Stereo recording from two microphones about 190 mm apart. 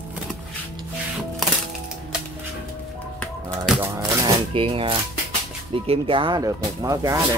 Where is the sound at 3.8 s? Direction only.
15° right (ahead or behind).